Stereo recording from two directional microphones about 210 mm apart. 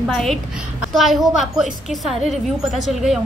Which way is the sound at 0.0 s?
Centre (ahead or behind).